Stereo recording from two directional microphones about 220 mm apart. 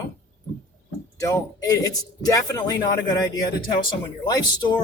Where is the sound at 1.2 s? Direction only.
15° left (ahead or behind).